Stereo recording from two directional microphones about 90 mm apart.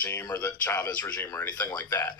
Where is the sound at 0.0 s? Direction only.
20° left (ahead or behind).